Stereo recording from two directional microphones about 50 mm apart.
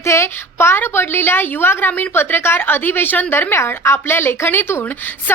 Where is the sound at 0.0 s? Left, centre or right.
Left.